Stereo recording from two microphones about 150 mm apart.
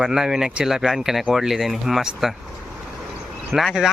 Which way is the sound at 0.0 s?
5° right (ahead or behind).